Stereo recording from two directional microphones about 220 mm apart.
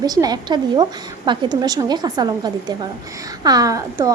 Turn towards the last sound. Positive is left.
turn(degrees=-15)  # may be behind; listen again after turning